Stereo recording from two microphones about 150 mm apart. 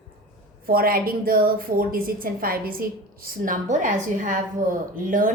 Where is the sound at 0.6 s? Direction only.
80° right.